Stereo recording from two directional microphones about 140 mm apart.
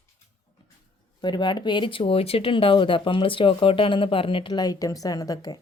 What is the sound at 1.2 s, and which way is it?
Speech, 30° left (ahead or behind).